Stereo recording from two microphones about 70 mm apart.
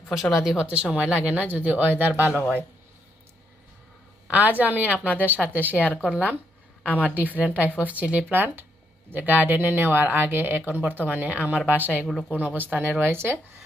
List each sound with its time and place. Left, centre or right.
0.1 s speech: centre; by 2.2 s right
2.3 s speech: left
4.3 s speech: right